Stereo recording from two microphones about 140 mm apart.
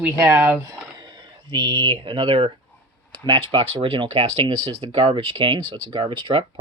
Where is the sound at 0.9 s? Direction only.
35° right (ahead or behind).